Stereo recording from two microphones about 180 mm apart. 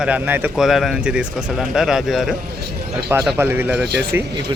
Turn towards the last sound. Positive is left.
turn(degrees=-10)  # may be behind; listen again after turning